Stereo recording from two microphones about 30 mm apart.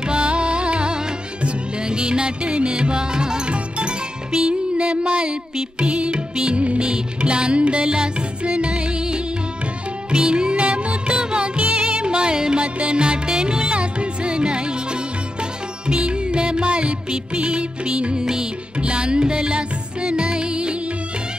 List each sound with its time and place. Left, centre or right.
0.0 s music: right
3.5 s music: right
10.5 s music: right
11.6 s music: right
12.6 s music: right
18.2 s music: right
18.8 s music: right